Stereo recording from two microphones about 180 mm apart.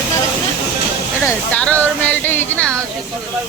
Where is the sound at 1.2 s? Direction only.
5° left (ahead or behind).